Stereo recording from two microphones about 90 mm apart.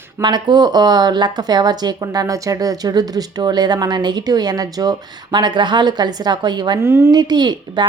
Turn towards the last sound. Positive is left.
turn(degrees=-55)  # may be behind; listen again after turning